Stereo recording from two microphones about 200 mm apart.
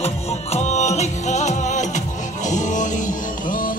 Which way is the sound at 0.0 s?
35° left (ahead or behind).